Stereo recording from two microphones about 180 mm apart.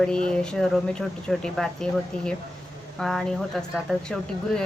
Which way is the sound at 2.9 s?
5° left (ahead or behind).